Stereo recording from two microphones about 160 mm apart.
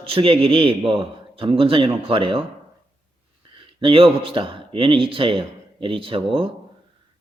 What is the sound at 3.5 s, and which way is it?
A man's voice, 35° right (ahead or behind).